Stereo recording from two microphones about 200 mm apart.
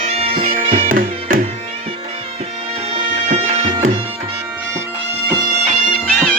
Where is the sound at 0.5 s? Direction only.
45° right (ahead or behind).